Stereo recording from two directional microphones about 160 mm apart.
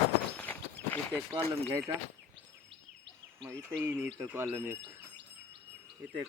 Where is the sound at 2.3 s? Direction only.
90° right.